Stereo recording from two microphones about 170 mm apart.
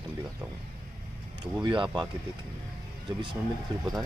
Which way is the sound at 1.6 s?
30° right (ahead or behind).